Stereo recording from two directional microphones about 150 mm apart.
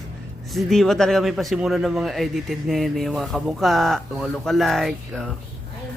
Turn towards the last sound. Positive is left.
turn(degrees=0)  # may be behind; listen again after turning